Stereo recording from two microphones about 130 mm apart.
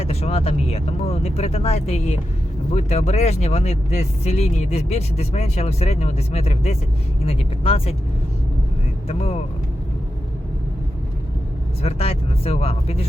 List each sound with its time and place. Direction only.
0.0 s speech: 50° left (ahead or behind)
9.0 s speech: 55° left (ahead or behind)
11.8 s speech: 50° left (ahead or behind)